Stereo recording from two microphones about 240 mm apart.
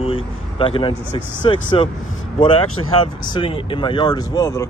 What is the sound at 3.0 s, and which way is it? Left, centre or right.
Speech, left.